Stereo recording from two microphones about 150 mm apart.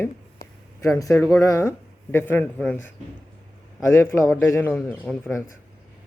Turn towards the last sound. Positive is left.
turn(degrees=5)  # may be behind; listen again after turning